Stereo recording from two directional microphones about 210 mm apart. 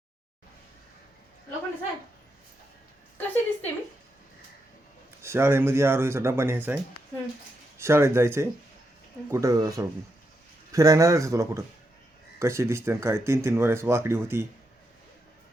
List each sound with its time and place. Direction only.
3.2 s a sound: 10° left (ahead or behind)
5.2 s speech: 10° right (ahead or behind)
7.8 s speech: 10° right (ahead or behind)